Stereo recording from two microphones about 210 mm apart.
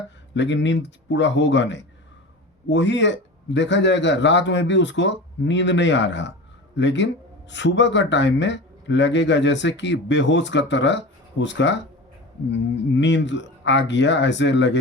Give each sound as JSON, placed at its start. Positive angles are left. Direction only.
{"t": 0.3, "sound": "speech", "side_deg": 60}